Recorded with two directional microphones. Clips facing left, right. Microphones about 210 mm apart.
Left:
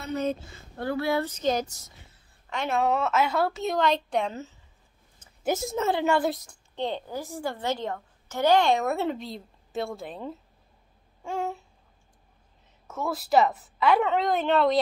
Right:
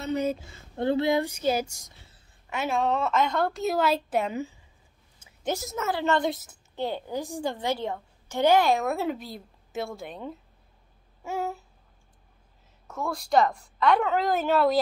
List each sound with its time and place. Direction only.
0.0 s a woman's voice: 10° right (ahead or behind)
0.7 s a woman's voice: 20° right (ahead or behind); by 2.8 s 5° right (ahead or behind)
2.8 s a woman's voice: 5° left (ahead or behind); by 4.6 s 10° right (ahead or behind)
5.2 s a sound: 10° right (ahead or behind)
5.6 s a woman's voice: 30° left (ahead or behind)
5.9 s a woman's voice: 10° left (ahead or behind)
12.8 s a woman's voice: 5° left (ahead or behind)